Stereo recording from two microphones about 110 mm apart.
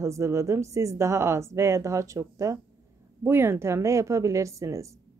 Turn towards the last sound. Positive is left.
turn(degrees=-30)  # may be behind; listen again after turning